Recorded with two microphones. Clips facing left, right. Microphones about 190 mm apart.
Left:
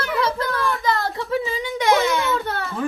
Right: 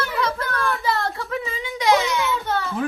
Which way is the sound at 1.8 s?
55° left (ahead or behind).